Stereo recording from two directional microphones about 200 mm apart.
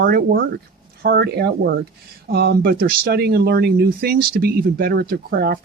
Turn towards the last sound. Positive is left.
turn(degrees=-50)  # may be behind; listen again after turning